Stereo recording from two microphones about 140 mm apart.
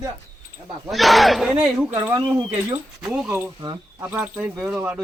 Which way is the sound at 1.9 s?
20° right (ahead or behind).